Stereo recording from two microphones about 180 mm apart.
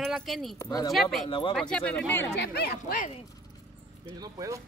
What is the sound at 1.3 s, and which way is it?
Speech, 30° left (ahead or behind).